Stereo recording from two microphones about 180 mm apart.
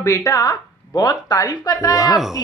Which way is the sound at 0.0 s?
15° left (ahead or behind).